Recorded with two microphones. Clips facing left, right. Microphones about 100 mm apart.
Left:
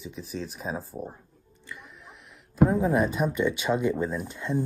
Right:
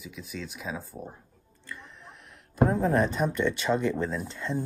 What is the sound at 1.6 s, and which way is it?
Music, 15° left (ahead or behind).